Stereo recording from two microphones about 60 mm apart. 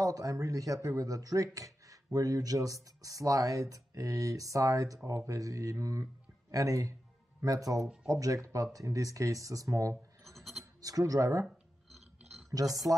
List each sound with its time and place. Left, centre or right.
0.0 s speech: right
2.1 s speech: right
6.5 s speech: right
7.4 s speech: right
8.1 s speech: right
10.2 s sheep: centre
10.6 s speech: right
12.6 s speech: right